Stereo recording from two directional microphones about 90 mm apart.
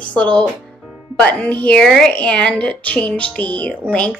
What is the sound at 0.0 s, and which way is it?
Speech, 15° left (ahead or behind).